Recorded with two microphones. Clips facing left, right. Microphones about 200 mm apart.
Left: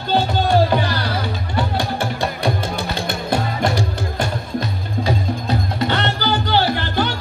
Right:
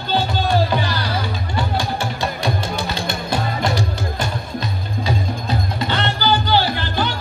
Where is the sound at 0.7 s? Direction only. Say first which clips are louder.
Left 2 dB; 55° left (ahead or behind).